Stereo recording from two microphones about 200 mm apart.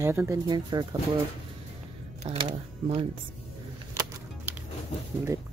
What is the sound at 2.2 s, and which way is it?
Speech, 30° right (ahead or behind).